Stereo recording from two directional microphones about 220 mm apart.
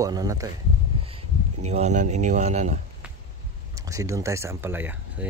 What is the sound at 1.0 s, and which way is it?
Speech, 25° right (ahead or behind).